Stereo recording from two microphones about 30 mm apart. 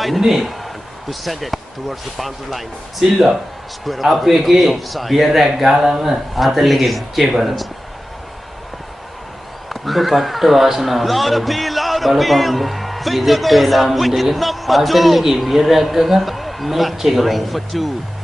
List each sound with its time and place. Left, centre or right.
0.2 s a man's voice: centre
5.7 s speech: centre
6.0 s a man's voice: centre
9.7 s a man's voice: centre
17.2 s a man's voice: centre